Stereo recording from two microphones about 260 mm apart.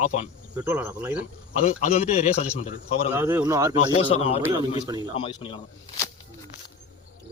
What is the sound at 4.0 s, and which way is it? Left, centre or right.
Speech, left.